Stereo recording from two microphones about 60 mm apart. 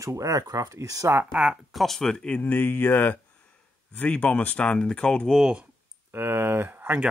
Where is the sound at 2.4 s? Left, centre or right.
Left.